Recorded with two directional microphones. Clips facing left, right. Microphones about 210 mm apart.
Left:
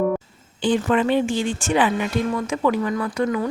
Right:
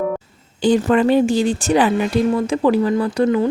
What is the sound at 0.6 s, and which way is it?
Speech, 40° right (ahead or behind).